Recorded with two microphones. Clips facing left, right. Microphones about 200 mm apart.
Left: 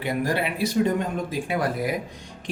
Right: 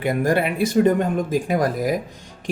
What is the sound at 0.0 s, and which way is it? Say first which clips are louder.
Speech: right 5 dB; 50° right (ahead or behind).